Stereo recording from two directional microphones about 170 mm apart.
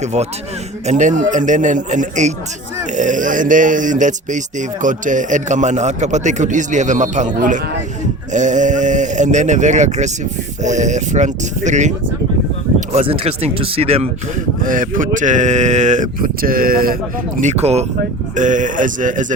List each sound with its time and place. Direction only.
0.0 s speech: 40° right (ahead or behind)
14.6 s speech: 50° right (ahead or behind)